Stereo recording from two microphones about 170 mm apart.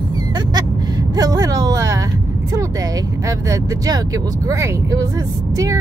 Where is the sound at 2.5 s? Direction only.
20° right (ahead or behind).